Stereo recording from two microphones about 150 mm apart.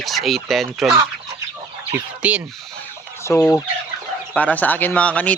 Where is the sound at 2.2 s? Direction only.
10° right (ahead or behind).